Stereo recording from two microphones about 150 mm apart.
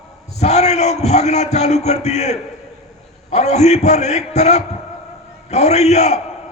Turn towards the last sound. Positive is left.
turn(degrees=45)  # may be behind; listen again after turning